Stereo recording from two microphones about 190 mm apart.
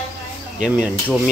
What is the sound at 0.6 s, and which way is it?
Speech, 5° right (ahead or behind).